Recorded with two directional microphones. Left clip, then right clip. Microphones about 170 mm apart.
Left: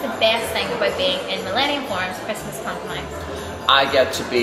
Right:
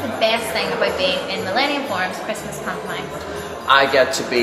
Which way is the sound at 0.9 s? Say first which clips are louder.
Right 1 dB; 10° left (ahead or behind).